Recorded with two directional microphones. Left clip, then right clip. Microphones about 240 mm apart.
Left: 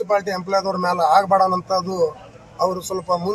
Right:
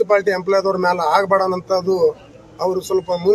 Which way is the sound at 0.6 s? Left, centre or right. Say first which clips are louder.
Right 2 dB; right.